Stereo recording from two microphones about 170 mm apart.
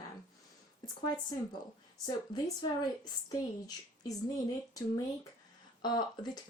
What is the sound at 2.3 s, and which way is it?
A woman's voice, 25° left (ahead or behind).